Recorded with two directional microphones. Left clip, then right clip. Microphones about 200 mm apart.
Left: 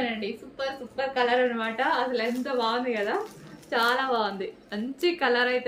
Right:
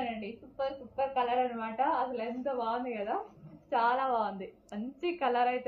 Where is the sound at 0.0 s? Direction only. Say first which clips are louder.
Left 7 dB; 20° left (ahead or behind).